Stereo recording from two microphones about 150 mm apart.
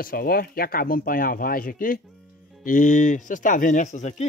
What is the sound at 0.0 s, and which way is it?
Speech, 80° left.